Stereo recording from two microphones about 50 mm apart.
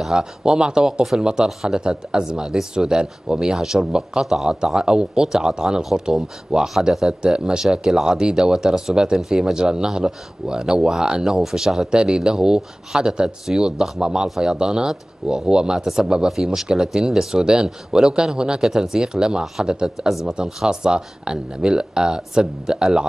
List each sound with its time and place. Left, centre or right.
0.0 s speech: centre